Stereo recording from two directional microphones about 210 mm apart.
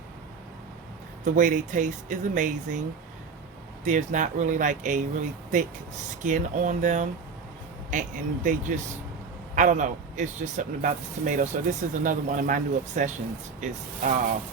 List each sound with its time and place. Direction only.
1.2 s speech: 35° right (ahead or behind)
3.8 s speech: 35° right (ahead or behind)